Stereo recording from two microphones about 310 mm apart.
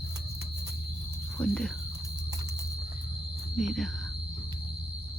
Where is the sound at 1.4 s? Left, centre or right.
Centre.